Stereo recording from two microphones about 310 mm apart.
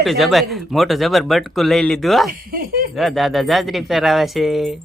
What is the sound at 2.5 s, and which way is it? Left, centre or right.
Speech, right.